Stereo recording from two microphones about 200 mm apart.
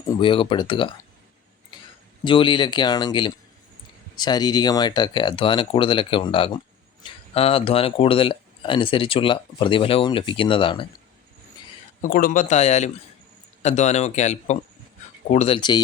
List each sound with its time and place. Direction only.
0.2 s speech: 25° left (ahead or behind)
2.2 s speech: 25° left (ahead or behind)
12.0 s speech: 45° left (ahead or behind); by 15.8 s 25° left (ahead or behind)